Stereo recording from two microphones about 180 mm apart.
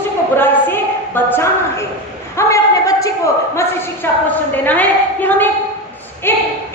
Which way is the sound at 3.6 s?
10° left (ahead or behind).